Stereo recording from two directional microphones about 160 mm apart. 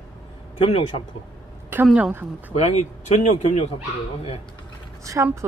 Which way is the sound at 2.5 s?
45° left (ahead or behind).